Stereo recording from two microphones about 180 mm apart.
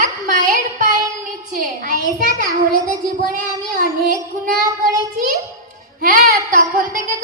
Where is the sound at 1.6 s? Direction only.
50° right (ahead or behind).